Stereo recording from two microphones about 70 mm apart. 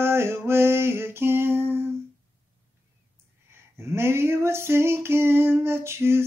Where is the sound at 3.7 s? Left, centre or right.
Right.